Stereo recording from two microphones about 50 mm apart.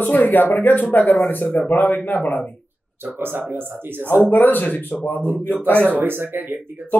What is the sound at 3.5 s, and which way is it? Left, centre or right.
Speech, right.